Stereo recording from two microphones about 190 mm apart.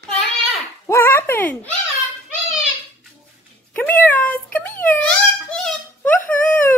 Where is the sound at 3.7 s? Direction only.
10° left (ahead or behind).